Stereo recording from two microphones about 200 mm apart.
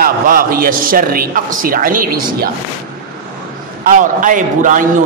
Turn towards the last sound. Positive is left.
turn(degrees=-40)  # may be behind; listen again after turning